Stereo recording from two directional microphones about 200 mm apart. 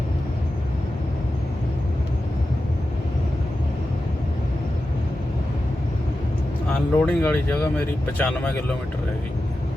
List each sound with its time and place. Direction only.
6.7 s speech: 5° left (ahead or behind)